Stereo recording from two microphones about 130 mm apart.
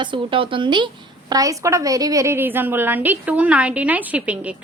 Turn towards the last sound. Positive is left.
turn(degrees=-10)  # may be behind; listen again after turning